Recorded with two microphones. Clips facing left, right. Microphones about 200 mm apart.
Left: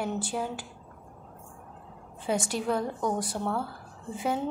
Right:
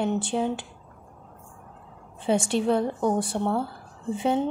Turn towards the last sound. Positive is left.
turn(degrees=-25)  # may be behind; listen again after turning